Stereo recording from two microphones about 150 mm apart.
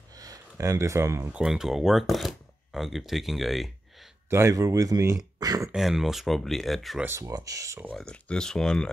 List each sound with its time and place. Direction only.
0.1 s a sound: 25° right (ahead or behind)
1.3 s speech: 5° right (ahead or behind)
4.3 s speech: 20° right (ahead or behind)
5.7 s speech: centre (ahead or behind)
7.1 s speech: 20° right (ahead or behind)
7.9 s speech: 5° left (ahead or behind)